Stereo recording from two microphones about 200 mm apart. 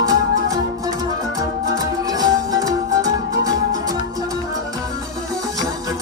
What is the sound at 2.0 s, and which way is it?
Music, 20° right (ahead or behind).